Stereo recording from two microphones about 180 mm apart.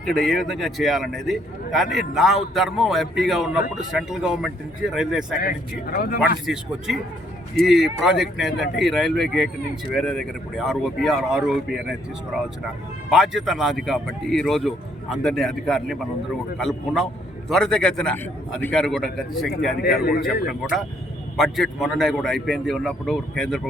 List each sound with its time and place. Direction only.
0.0 s a man's voice: centre (ahead or behind)
5.4 s speech: 55° left (ahead or behind)
6.4 s a man's voice: 5° right (ahead or behind)
13.1 s a man's voice: centre (ahead or behind)
19.8 s speech: 55° left (ahead or behind)
20.5 s a man's voice: centre (ahead or behind)